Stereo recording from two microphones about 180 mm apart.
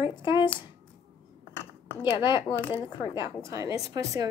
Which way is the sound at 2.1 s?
25° left (ahead or behind).